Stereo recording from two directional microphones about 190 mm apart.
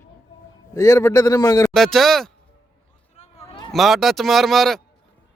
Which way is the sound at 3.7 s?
Centre (ahead or behind).